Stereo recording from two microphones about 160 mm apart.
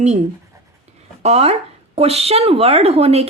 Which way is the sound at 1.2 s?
40° right (ahead or behind).